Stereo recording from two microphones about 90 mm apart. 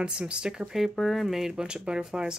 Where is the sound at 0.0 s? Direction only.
10° right (ahead or behind).